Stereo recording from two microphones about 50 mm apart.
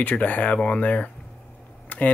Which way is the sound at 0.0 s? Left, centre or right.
Left.